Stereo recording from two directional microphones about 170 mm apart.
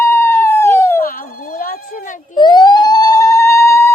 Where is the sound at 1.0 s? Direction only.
60° left (ahead or behind).